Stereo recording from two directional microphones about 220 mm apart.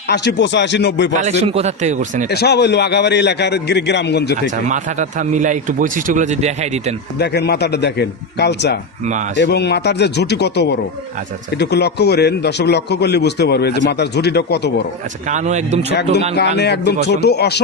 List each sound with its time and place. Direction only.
0.1 s a man's voice: 50° left (ahead or behind)
1.2 s a man's voice: 30° right (ahead or behind)
2.3 s a man's voice: 45° left (ahead or behind)
4.5 s a man's voice: 35° right (ahead or behind)
7.2 s a man's voice: 50° left (ahead or behind)
15.3 s a man's voice: 35° right (ahead or behind)
16.3 s a man's voice: 50° left (ahead or behind)